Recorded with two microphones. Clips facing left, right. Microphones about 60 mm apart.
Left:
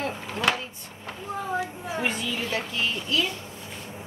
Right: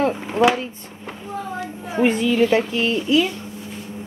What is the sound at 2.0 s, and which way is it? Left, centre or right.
Speech, right.